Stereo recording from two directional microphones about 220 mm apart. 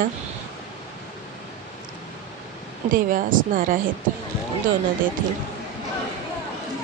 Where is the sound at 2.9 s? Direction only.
40° right (ahead or behind).